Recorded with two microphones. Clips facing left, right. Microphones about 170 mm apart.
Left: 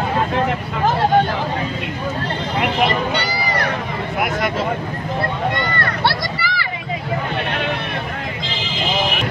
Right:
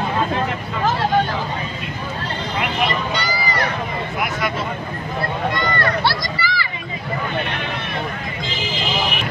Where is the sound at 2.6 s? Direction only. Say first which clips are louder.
Left 4 dB; 60° left (ahead or behind).